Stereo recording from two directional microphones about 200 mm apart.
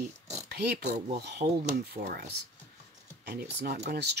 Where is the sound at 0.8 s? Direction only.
35° right (ahead or behind).